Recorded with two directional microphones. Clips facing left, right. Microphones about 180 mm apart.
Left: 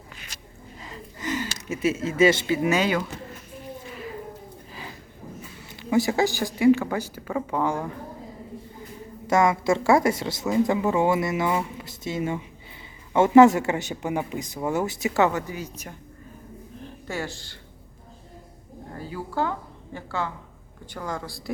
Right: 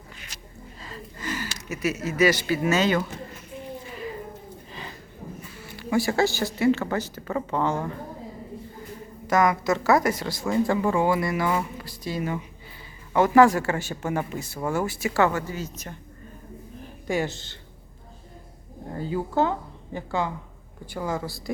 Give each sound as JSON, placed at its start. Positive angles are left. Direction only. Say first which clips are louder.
{"t": 0.8, "sound": "a sound", "louder": "left 1 dB", "side_deg": 20}
{"t": 3.8, "sound": "a sound", "louder": "right 1 dB", "side_deg": 0}
{"t": 5.6, "sound": "speech", "louder": "left 2 dB", "side_deg": 20}
{"t": 9.2, "sound": "speech", "louder": "left 1 dB", "side_deg": 25}
{"t": 17.1, "sound": "speech", "louder": "right 6 dB", "side_deg": -20}
{"t": 18.9, "sound": "speech", "louder": "right 4 dB", "side_deg": -25}